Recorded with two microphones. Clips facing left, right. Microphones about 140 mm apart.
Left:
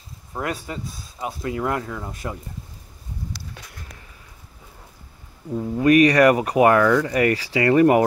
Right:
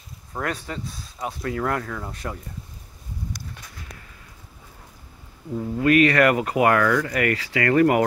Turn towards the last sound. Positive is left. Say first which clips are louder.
# left 3 dB
turn(degrees=20)  # may be behind; listen again after turning